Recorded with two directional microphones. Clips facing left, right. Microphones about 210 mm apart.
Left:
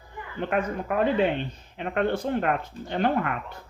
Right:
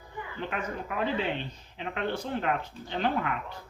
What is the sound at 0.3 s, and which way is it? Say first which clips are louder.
Speech: left 8 dB; 55° left (ahead or behind).